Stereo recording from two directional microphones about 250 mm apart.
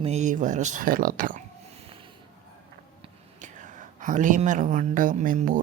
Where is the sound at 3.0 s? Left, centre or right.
Right.